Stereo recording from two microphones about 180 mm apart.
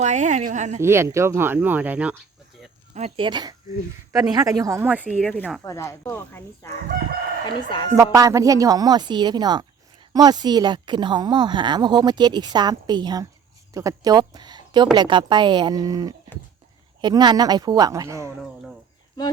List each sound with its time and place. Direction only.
0.0 s a woman's voice: 40° right (ahead or behind)
0.8 s speech: 15° right (ahead or behind)
2.9 s speech: 35° right (ahead or behind)
3.2 s a woman's voice: 25° right (ahead or behind); by 5.6 s centre (ahead or behind)
5.6 s speech: 15° left (ahead or behind)
7.4 s speech: 25° left (ahead or behind)
7.9 s a woman's voice: 20° right (ahead or behind)